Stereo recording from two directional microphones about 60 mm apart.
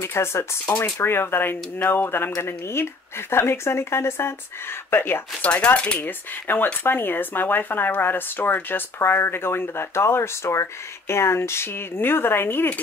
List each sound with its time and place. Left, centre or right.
0.0 s speech: left
5.4 s speech: centre
5.9 s speech: left